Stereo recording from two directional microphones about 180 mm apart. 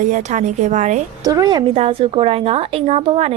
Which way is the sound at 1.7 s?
30° right (ahead or behind).